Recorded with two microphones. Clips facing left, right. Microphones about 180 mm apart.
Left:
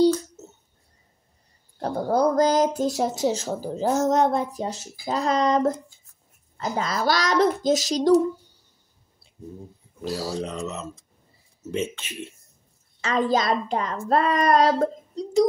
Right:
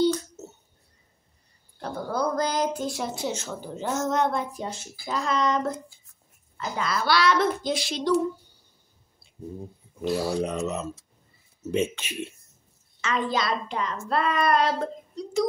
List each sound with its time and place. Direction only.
1.8 s speech: 40° left (ahead or behind)
10.2 s speech: 15° right (ahead or behind)
13.0 s speech: 40° left (ahead or behind)